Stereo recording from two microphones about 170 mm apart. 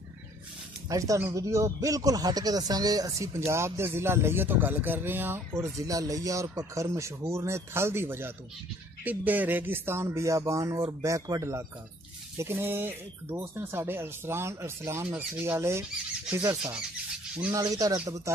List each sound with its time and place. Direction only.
0.8 s speech: 20° right (ahead or behind)
17.5 s speech: 20° right (ahead or behind)